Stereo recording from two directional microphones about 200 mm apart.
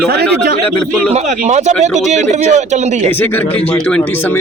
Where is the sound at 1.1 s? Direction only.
35° right (ahead or behind).